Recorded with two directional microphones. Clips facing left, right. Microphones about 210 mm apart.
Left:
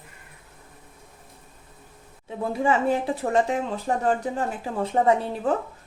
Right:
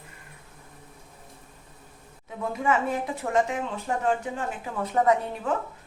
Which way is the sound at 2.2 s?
30° left (ahead or behind).